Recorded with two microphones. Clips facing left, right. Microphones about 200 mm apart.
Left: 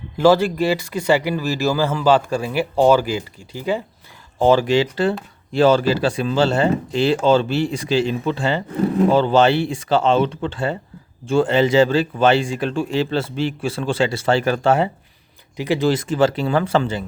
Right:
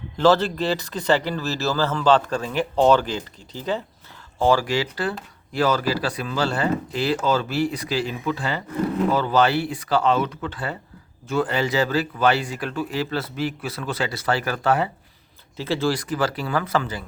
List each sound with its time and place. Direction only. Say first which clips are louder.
0.2 s speech: left 3 dB; 10° left (ahead or behind)
4.4 s speech: left 5 dB; 20° left (ahead or behind)